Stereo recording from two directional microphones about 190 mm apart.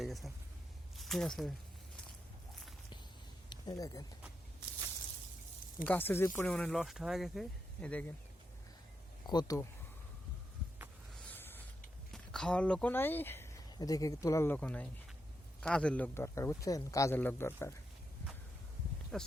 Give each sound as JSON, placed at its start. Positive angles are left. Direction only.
{"t": 0.0, "sound": "a sound", "side_deg": 0}
{"t": 0.9, "sound": "speech", "side_deg": 0}
{"t": 3.5, "sound": "speech", "side_deg": 20}
{"t": 5.8, "sound": "speech", "side_deg": 10}
{"t": 9.2, "sound": "speech", "side_deg": 20}
{"t": 11.1, "sound": "a sound", "side_deg": 5}
{"t": 12.1, "sound": "speech", "side_deg": 5}
{"t": 19.1, "sound": "speech", "side_deg": 5}